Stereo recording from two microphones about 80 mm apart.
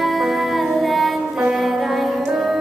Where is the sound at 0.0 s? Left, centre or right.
Centre.